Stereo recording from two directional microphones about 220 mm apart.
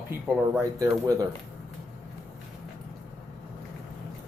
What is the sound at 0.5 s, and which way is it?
Speech, 15° right (ahead or behind).